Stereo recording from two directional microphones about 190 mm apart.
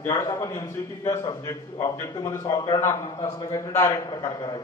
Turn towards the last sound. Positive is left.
turn(degrees=15)  # may be behind; listen again after turning